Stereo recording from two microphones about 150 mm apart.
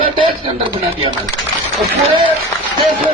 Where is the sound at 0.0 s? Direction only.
35° right (ahead or behind).